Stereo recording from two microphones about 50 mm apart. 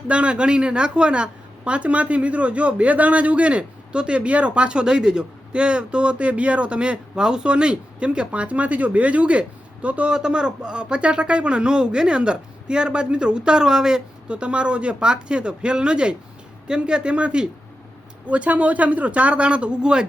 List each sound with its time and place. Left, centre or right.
0.1 s a woman's voice: right
10.1 s a woman's voice: centre